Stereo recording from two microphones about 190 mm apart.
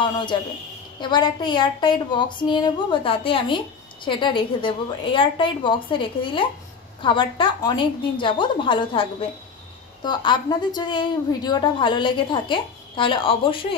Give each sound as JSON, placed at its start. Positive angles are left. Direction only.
{"t": 0.0, "sound": "a man's voice", "side_deg": 25}
{"t": 10.0, "sound": "a woman's voice", "side_deg": 25}